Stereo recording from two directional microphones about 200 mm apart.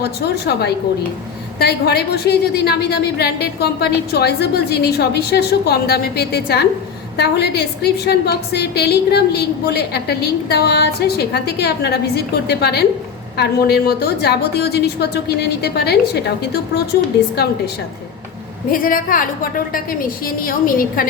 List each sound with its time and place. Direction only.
0.0 s a woman's voice: 55° left (ahead or behind)
18.7 s a woman's voice: 45° left (ahead or behind)